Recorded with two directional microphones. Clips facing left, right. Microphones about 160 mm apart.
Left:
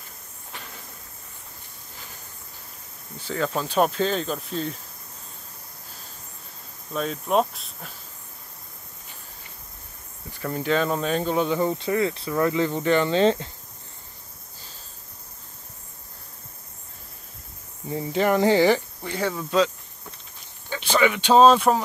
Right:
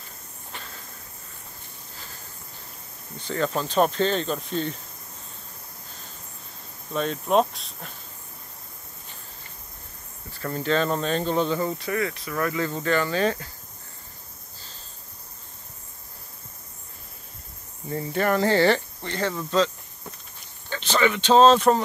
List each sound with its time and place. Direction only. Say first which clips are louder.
0.5 s a sound: even; 10° left (ahead or behind)
3.2 s speech: even; 5° left (ahead or behind)
6.9 s speech: right 1 dB; centre (ahead or behind)
10.3 s speech: left 1 dB; 10° left (ahead or behind)
17.8 s speech: left 2 dB; 15° left (ahead or behind)
20.7 s speech: left 1 dB; 10° left (ahead or behind)